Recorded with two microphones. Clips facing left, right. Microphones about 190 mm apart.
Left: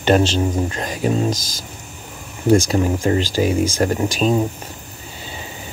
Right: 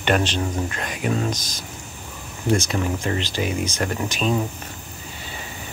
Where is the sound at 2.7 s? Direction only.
30° left (ahead or behind).